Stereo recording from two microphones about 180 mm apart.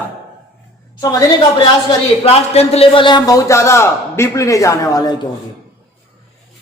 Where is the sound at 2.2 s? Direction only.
35° left (ahead or behind).